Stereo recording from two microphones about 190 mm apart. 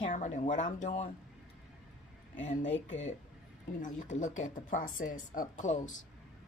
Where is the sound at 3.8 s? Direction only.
40° left (ahead or behind).